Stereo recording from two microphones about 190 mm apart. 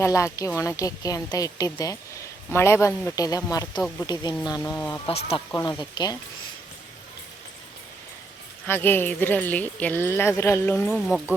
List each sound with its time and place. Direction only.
0.0 s speech: 15° left (ahead or behind)
5.0 s speech: 30° left (ahead or behind)
5.5 s speech: 20° left (ahead or behind)
8.6 s speech: 10° left (ahead or behind)
10.8 s speech: 5° left (ahead or behind)